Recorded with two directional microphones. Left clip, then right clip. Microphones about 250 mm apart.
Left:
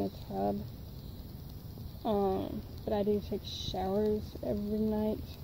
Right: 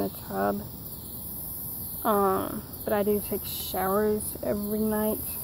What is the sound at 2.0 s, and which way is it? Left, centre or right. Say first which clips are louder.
Speech: right 7 dB; right.